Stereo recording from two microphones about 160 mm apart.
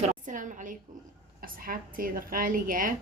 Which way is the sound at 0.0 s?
50° right (ahead or behind).